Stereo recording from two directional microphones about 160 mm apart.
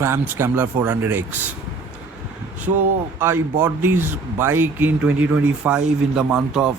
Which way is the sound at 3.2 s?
15° right (ahead or behind).